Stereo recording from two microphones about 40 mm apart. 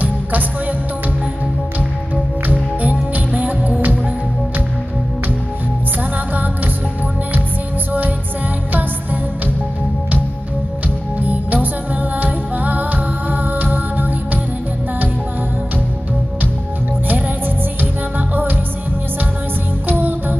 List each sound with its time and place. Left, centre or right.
0.0 s music: right
2.4 s music: right
11.2 s music: right
18.3 s music: right
19.9 s music: right